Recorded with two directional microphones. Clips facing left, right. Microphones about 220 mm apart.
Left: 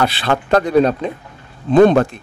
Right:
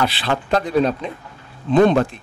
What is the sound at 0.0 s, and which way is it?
Speech, 55° left (ahead or behind).